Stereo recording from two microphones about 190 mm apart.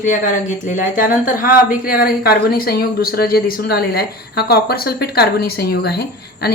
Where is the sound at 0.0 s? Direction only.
40° left (ahead or behind).